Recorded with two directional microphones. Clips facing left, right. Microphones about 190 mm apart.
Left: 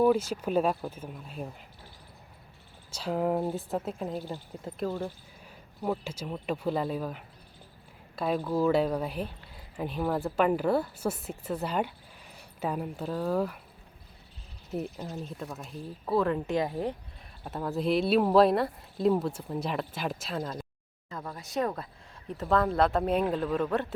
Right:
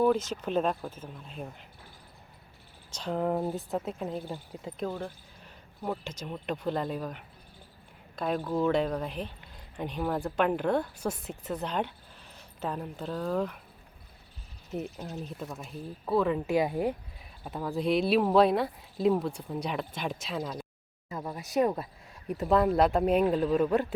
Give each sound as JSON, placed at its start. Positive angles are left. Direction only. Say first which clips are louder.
{"t": 0.0, "sound": "speech", "louder": "left 2 dB", "side_deg": 10}
{"t": 2.9, "sound": "speech", "louder": "left 1 dB", "side_deg": 5}
{"t": 14.7, "sound": "speech", "louder": "left 1 dB", "side_deg": 0}
{"t": 17.4, "sound": "speech", "louder": "even", "side_deg": 0}
{"t": 21.1, "sound": "speech", "louder": "right 3 dB", "side_deg": -20}